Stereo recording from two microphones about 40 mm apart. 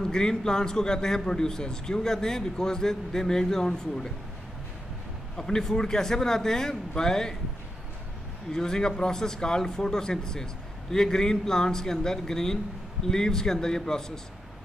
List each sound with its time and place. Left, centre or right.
0.0 s a man's voice: centre
5.4 s a man's voice: centre
8.5 s a man's voice: centre